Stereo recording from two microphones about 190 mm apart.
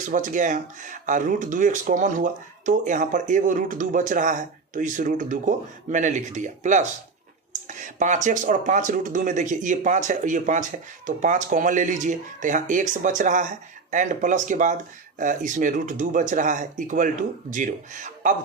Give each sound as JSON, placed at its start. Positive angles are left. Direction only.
{"t": 0.0, "sound": "speech", "side_deg": -40}